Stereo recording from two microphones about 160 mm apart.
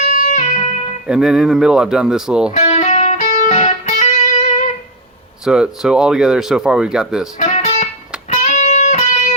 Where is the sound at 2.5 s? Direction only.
45° left (ahead or behind).